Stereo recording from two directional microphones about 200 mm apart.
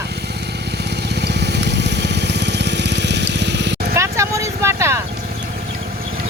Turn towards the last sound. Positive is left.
turn(degrees=-15)  # may be behind; listen again after turning